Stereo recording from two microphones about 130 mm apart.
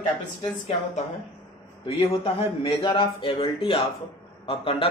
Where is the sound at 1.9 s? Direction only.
50° left (ahead or behind).